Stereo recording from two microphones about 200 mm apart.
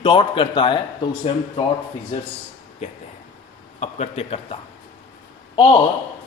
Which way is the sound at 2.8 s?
30° left (ahead or behind).